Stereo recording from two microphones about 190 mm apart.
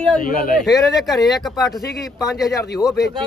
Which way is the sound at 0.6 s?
Centre (ahead or behind).